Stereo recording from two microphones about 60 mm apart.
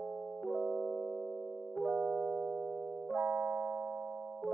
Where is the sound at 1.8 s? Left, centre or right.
Centre.